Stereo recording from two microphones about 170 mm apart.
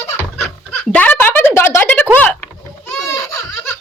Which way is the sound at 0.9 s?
10° left (ahead or behind).